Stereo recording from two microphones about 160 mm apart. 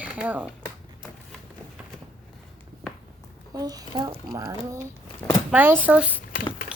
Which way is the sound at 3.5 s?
25° right (ahead or behind).